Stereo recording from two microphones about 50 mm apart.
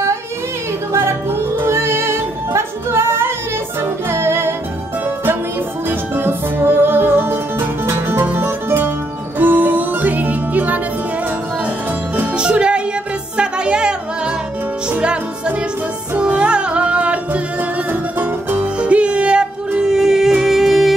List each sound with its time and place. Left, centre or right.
1.7 s music: right
12.4 s music: right
18.2 s music: right
18.8 s music: right
19.9 s music: centre